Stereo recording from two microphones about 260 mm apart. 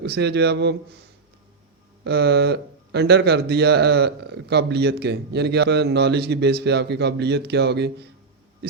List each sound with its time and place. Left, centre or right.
0.0 s speech: right
2.0 s speech: right